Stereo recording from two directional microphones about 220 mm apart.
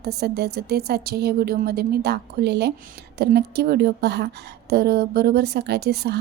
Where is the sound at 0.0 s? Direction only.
45° right (ahead or behind).